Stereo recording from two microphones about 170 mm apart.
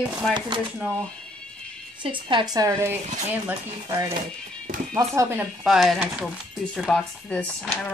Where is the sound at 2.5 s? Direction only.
15° right (ahead or behind).